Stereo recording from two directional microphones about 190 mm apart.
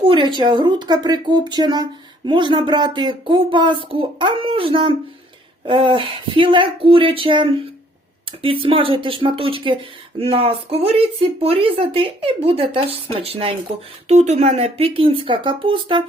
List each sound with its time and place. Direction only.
0.0 s speech: 25° right (ahead or behind)